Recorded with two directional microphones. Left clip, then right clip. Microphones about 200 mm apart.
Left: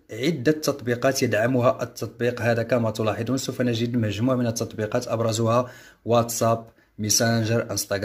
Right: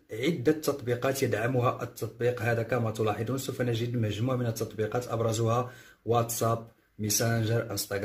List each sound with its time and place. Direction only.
0.2 s speech: 40° left (ahead or behind)